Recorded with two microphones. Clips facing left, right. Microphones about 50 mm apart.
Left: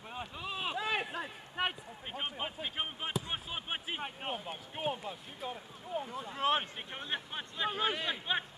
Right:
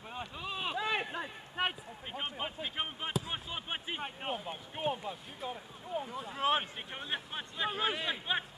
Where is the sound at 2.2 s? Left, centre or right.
Centre.